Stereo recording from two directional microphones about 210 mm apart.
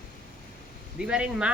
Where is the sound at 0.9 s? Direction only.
5° right (ahead or behind).